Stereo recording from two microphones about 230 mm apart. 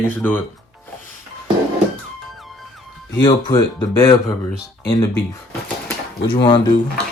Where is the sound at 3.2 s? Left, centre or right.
Centre.